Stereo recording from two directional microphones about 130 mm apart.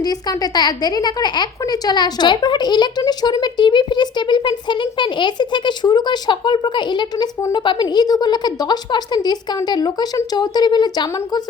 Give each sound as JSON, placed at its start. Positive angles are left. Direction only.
{"t": 0.0, "sound": "speech", "side_deg": 30}